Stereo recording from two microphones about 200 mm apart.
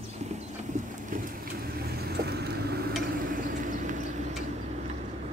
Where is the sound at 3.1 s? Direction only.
45° right (ahead or behind).